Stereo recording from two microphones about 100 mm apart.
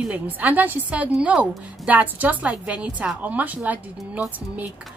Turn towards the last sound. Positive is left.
turn(degrees=-15)  # may be behind; listen again after turning